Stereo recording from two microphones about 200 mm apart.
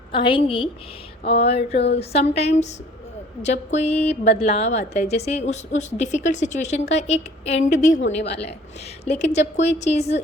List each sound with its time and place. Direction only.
0.1 s a woman's voice: 25° left (ahead or behind)
1.7 s a woman's voice: 55° left (ahead or behind)
2.0 s a woman's voice: 30° left (ahead or behind)
8.0 s a woman's voice: 60° left (ahead or behind)
9.6 s a woman's voice: 35° left (ahead or behind)